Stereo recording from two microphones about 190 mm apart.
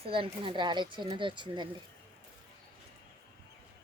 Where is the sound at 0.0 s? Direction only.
30° right (ahead or behind).